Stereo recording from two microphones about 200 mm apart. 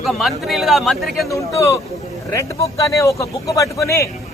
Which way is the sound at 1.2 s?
15° left (ahead or behind).